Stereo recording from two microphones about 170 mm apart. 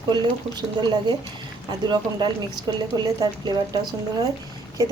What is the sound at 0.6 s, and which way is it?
Speech, 25° right (ahead or behind).